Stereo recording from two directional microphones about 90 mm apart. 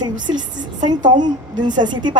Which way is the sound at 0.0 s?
55° right (ahead or behind).